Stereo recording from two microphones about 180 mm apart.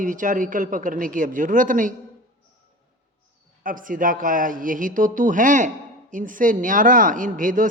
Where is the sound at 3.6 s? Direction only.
50° right (ahead or behind).